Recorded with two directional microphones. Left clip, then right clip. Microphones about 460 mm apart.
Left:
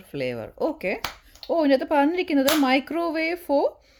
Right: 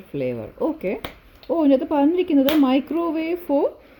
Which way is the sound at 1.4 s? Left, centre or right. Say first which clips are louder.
Right 1 dB; left.